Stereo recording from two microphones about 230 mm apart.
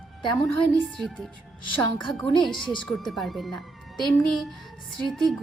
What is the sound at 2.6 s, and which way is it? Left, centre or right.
Speech, left.